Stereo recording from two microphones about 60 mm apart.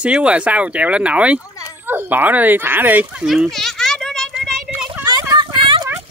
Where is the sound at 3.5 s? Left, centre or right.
Centre.